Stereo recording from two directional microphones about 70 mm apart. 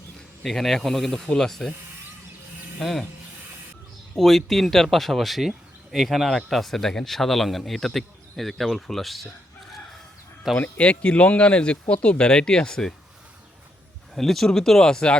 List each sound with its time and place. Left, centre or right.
0.4 s speech: centre
2.7 s speech: centre
4.1 s speech: centre
10.5 s speech: centre
14.2 s speech: centre